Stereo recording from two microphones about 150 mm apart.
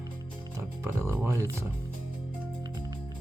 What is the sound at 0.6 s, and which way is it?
Music, 20° right (ahead or behind).